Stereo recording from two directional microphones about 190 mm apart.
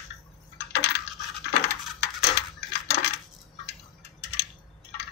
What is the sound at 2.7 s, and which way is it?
Crushing, 60° left (ahead or behind).